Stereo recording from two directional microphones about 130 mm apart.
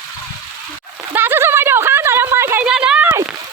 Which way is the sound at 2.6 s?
5° right (ahead or behind).